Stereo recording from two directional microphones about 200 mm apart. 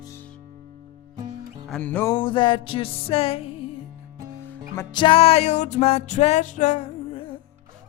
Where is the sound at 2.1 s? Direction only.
25° left (ahead or behind).